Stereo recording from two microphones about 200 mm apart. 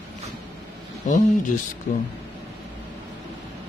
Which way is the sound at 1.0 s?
40° left (ahead or behind).